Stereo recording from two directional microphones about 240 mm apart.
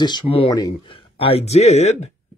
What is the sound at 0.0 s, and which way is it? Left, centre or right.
Speech, left.